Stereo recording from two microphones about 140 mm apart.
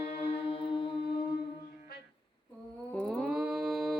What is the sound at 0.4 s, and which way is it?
Music, 40° left (ahead or behind).